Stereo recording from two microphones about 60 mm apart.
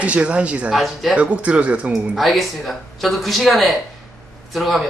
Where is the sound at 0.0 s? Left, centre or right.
Right.